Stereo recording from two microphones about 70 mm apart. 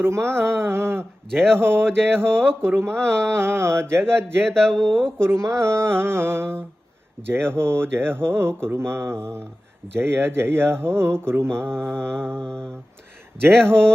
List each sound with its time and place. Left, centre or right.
0.0 s mantra: right
4.4 s speech: centre
5.4 s mantra: right
12.4 s speech: centre